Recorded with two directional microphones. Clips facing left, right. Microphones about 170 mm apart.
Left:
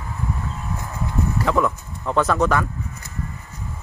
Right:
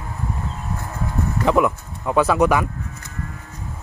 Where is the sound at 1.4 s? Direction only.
15° right (ahead or behind).